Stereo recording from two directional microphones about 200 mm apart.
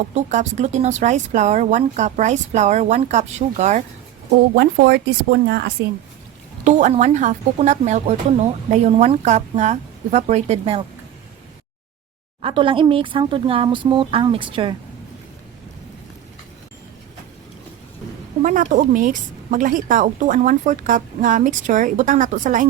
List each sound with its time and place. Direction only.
0.1 s a woman's voice: 35° right (ahead or behind)
4.5 s speech: 55° right (ahead or behind)
6.7 s a woman's voice: 35° right (ahead or behind)
12.4 s speech: 25° right (ahead or behind)
18.4 s a woman's voice: 40° right (ahead or behind)